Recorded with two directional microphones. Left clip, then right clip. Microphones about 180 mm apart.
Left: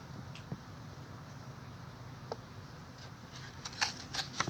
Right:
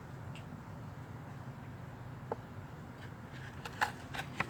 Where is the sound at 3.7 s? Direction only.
20° right (ahead or behind).